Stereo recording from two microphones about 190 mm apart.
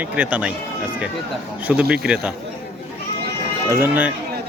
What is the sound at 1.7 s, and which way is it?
Speech, 5° right (ahead or behind).